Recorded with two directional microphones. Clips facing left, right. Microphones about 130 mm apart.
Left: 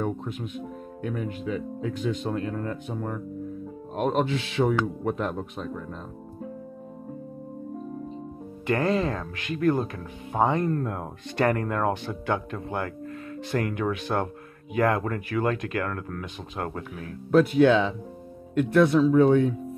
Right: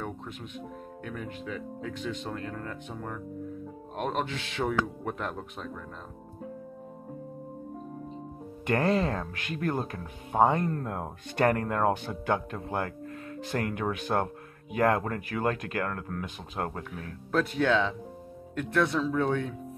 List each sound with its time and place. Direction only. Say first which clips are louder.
0.0 s speech: left 8 dB; 10° left (ahead or behind)
8.6 s speech: left 2 dB; 50° right (ahead or behind)
10.7 s speech: left 5 dB; 25° right (ahead or behind)
11.3 s speech: left 1 dB; 45° right (ahead or behind)
11.6 s speech: left 1 dB; 30° right (ahead or behind)
17.3 s speech: left 8 dB; 10° left (ahead or behind)